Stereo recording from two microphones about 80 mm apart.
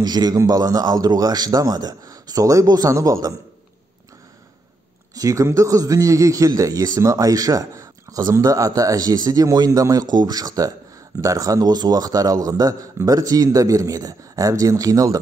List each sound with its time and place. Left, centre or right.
0.0 s a man's voice: right
0.4 s a man's voice: right
5.1 s a man's voice: right